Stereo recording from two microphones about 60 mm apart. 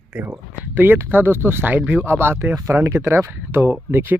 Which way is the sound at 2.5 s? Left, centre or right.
Right.